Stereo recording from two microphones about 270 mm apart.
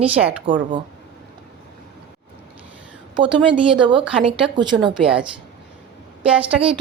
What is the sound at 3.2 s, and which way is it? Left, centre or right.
Speech, centre.